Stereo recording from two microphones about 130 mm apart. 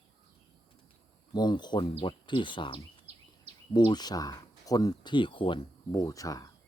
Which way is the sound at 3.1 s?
55° right (ahead or behind).